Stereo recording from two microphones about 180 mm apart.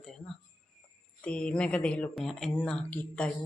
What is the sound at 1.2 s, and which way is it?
Speech, 5° left (ahead or behind).